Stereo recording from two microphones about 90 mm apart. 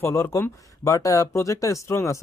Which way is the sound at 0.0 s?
35° left (ahead or behind).